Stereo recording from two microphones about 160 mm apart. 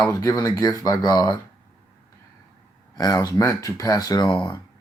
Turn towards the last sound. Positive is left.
turn(degrees=25)  # may be behind; listen again after turning